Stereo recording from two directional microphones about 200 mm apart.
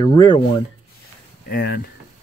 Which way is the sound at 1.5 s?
50° left (ahead or behind).